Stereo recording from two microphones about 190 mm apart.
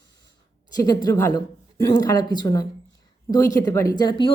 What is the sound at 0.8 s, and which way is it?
A woman's voice, 20° left (ahead or behind).